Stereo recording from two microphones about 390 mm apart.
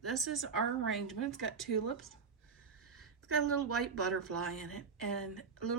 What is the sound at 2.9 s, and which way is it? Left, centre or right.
A woman's voice, right.